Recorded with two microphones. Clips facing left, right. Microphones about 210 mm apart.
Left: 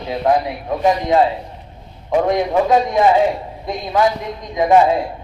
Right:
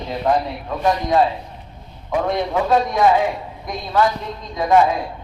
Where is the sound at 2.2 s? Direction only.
15° left (ahead or behind).